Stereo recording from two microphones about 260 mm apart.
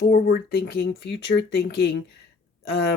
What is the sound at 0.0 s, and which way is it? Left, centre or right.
Speech, left.